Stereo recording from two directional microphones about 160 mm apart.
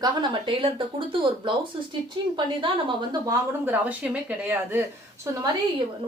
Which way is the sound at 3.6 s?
10° right (ahead or behind).